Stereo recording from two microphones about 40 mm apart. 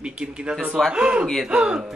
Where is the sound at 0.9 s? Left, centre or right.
Right.